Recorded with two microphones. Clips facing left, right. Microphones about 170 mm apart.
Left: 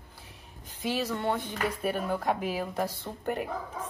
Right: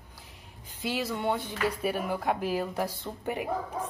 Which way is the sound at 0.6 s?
10° right (ahead or behind).